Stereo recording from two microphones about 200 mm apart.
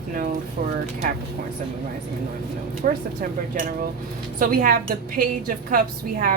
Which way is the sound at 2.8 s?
45° right (ahead or behind).